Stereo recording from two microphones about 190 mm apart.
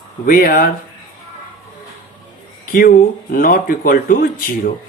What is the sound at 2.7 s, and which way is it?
Speech, 50° left (ahead or behind).